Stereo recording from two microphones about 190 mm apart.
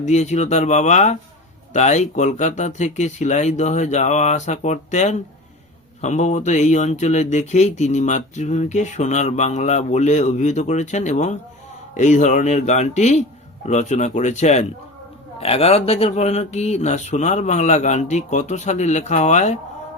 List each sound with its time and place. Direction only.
0.0 s speech: 35° left (ahead or behind)